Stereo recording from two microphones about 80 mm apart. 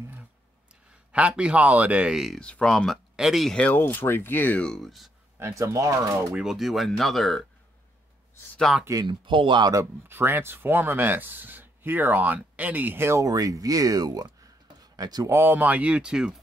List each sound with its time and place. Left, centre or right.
1.1 s speech: centre
2.1 s speech: centre
2.4 s speech: centre
3.5 s speech: left
4.6 s speech: centre
5.4 s speech: right
6.4 s speech: centre
8.7 s speech: centre
9.0 s speech: right
10.0 s speech: right
13.2 s speech: right
14.8 s a sound: right
15.2 s speech: right; by 16.3 s centre